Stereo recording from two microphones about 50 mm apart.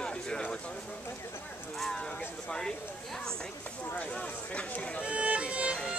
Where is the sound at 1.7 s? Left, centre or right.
Centre.